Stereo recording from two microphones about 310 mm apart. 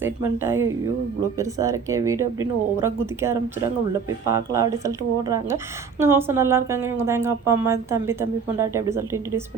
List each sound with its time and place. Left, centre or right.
0.2 s speech: centre